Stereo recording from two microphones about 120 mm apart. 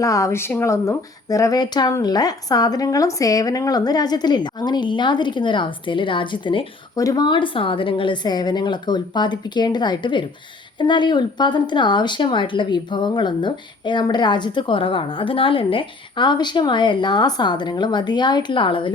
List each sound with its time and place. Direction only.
0.0 s speech: 25° left (ahead or behind); by 6.7 s 45° left (ahead or behind)
6.9 s speech: 30° left (ahead or behind)